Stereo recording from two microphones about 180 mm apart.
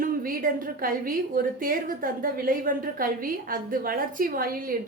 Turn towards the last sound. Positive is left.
turn(degrees=-55)  # may be behind; listen again after turning